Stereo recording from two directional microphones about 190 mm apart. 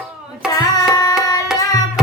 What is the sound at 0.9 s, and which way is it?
Tabla, 20° left (ahead or behind).